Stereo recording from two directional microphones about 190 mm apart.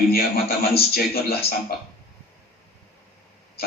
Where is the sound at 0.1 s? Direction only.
55° left (ahead or behind).